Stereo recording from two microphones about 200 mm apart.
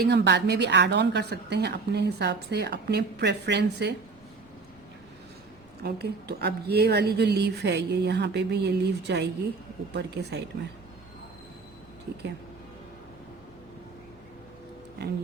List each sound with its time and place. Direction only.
0.0 s a woman's voice: 55° right (ahead or behind)
5.8 s a woman's voice: 55° right (ahead or behind)